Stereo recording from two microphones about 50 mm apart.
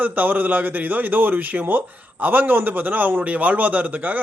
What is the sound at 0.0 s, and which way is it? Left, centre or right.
A man's voice, right.